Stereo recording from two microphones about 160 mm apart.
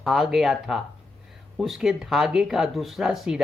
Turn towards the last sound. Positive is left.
turn(degrees=0)  # may be behind; listen again after turning